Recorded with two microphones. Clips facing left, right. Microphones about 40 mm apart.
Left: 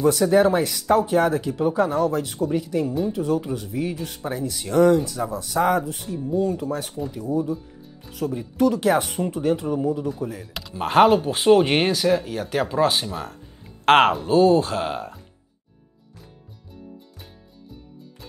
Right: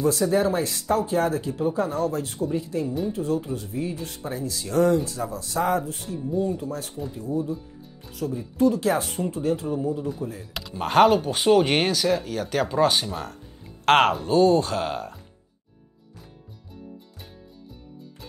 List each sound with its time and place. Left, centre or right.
0.0 s speech: left
1.9 s speech: left
4.2 s speech: left
6.1 s speech: centre
6.6 s speech: left
8.1 s speech: left
10.5 s speech: centre